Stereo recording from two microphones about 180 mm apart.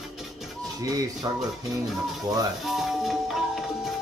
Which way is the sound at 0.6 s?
20° right (ahead or behind).